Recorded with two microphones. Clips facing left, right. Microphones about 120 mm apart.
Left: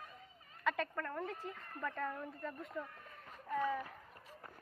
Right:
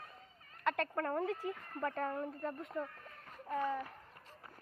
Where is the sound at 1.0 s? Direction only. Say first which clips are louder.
Right 6 dB; 65° right (ahead or behind).